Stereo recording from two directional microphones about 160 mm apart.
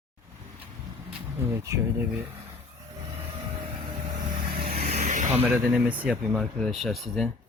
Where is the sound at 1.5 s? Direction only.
15° right (ahead or behind).